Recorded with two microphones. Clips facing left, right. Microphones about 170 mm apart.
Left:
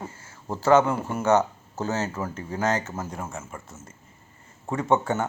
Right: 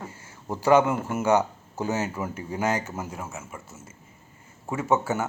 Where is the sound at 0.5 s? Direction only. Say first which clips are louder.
Even; 10° right (ahead or behind).